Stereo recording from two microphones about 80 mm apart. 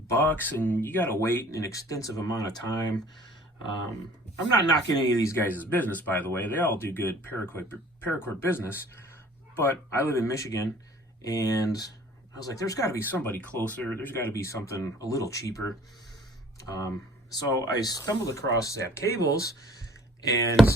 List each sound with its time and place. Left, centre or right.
0.1 s speech: left
3.2 s a sound: left
4.6 s speech: left
5.4 s speech: left
13.1 s speech: left
14.4 s speech: left
17.3 s speech: left